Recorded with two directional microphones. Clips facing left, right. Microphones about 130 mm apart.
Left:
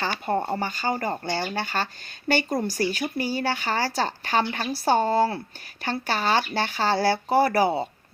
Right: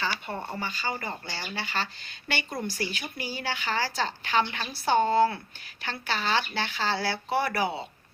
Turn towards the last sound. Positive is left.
turn(degrees=40)  # may be behind; listen again after turning